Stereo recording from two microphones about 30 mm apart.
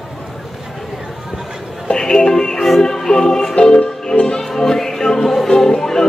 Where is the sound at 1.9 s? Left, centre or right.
Left.